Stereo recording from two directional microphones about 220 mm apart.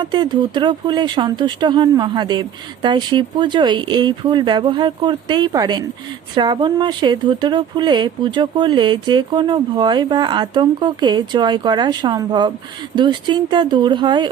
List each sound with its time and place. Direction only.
0.0 s speech: 20° right (ahead or behind)